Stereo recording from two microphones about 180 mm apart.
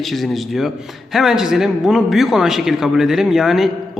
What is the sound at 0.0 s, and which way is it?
A man's voice, centre (ahead or behind).